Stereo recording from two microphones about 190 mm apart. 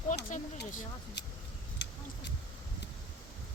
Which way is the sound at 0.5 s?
45° left (ahead or behind).